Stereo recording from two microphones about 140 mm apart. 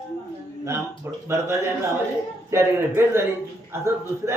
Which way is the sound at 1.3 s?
20° right (ahead or behind).